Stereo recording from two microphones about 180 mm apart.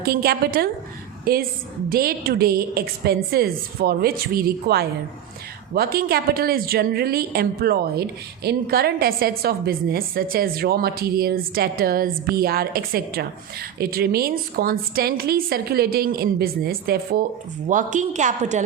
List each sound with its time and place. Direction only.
0.0 s a woman's voice: 60° right (ahead or behind)
17.7 s a woman's voice: 45° right (ahead or behind)